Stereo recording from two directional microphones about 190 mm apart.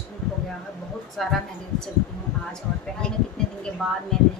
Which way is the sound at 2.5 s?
5° left (ahead or behind).